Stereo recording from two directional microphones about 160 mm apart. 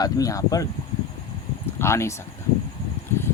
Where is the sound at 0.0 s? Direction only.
20° left (ahead or behind).